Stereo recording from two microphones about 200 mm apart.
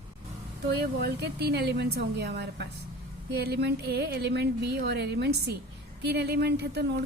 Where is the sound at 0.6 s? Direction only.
55° right (ahead or behind).